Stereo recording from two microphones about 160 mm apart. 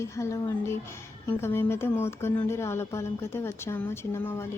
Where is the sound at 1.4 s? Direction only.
15° left (ahead or behind).